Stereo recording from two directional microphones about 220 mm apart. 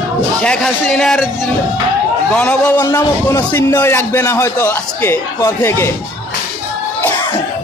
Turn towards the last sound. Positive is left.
turn(degrees=10)  # may be behind; listen again after turning